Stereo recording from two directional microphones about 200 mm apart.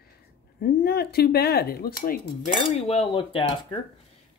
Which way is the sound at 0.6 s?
50° left (ahead or behind).